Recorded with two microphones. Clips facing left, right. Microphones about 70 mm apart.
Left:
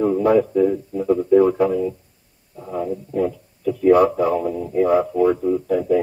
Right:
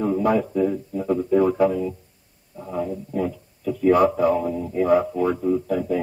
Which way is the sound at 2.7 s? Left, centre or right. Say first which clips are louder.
Left 2 dB; left.